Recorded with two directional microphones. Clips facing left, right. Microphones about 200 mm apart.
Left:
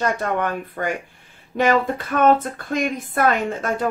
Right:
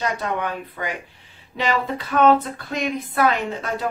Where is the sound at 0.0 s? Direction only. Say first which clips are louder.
Left 3 dB; 50° left (ahead or behind).